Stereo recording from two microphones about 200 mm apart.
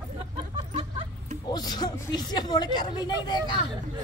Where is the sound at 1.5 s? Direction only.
20° left (ahead or behind).